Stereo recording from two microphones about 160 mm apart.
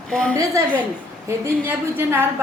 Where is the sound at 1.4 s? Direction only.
15° right (ahead or behind).